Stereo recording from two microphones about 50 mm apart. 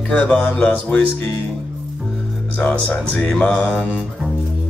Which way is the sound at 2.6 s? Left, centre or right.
Left.